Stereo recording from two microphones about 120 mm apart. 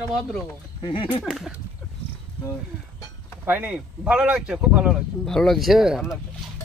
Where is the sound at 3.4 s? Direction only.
15° right (ahead or behind).